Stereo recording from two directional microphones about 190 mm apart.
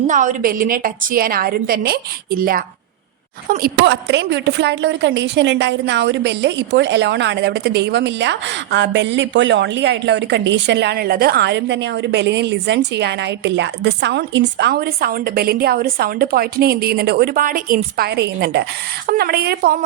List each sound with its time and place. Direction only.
0.1 s a woman's voice: 40° right (ahead or behind)
3.8 s a woman's voice: 65° right (ahead or behind)